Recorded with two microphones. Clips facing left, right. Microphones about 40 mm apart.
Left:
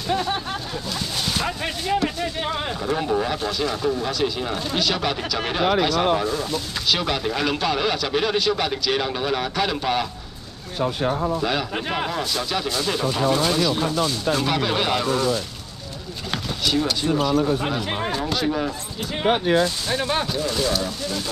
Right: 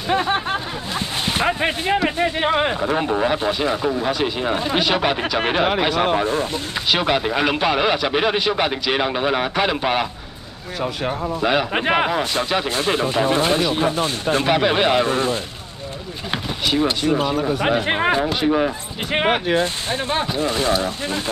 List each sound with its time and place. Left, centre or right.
0.1 s a sound: right
2.0 s speech: right
11.4 s speech: right
16.3 s a sound: right
17.6 s speech: right
19.1 s speech: right